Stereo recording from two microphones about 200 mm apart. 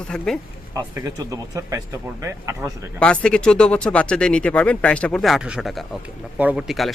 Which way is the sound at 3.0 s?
5° left (ahead or behind).